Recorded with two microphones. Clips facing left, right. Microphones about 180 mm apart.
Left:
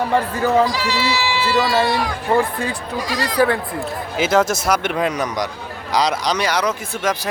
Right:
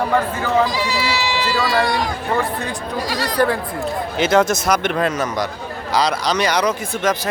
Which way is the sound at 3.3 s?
Centre (ahead or behind).